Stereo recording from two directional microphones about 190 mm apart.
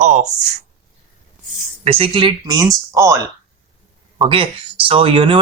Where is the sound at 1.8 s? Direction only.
30° right (ahead or behind).